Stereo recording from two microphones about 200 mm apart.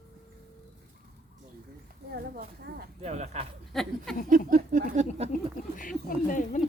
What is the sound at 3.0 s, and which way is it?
Speech, 35° right (ahead or behind).